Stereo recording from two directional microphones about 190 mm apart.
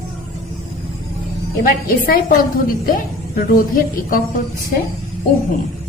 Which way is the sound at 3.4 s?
50° left (ahead or behind).